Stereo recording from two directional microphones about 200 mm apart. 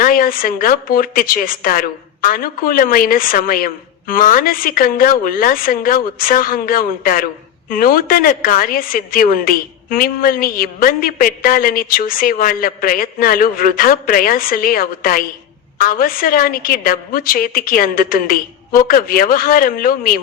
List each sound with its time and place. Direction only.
0.0 s a woman's voice: 45° left (ahead or behind)